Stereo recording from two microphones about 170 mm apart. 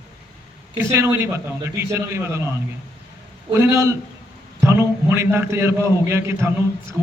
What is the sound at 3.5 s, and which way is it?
A man's voice, 15° right (ahead or behind).